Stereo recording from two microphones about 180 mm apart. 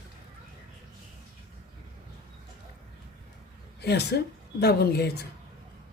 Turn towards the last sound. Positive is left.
turn(degrees=65)  # may be behind; listen again after turning